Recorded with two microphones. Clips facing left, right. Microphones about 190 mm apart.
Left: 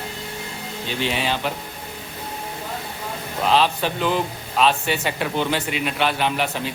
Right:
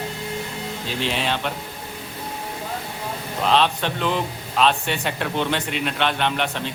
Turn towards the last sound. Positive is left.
turn(degrees=5)  # may be behind; listen again after turning